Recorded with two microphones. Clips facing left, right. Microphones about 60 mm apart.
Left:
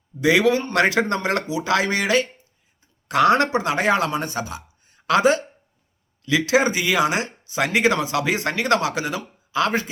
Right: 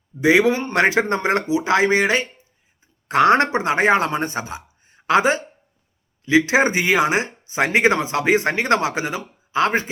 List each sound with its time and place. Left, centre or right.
0.2 s speech: right